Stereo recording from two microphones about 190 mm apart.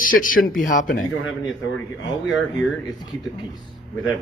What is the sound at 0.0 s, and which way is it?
Speech, 45° left (ahead or behind).